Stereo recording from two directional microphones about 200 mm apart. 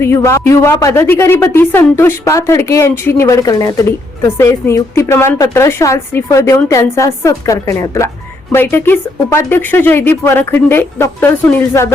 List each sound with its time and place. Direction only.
0.0 s a woman's voice: 10° left (ahead or behind)